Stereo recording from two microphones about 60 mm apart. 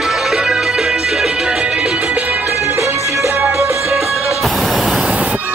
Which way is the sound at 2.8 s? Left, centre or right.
Right.